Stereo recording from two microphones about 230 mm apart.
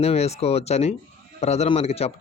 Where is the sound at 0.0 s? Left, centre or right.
Left.